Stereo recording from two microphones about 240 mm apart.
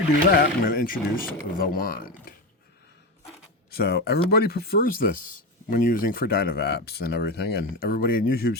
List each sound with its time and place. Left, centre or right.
0.3 s speech: left
3.7 s speech: left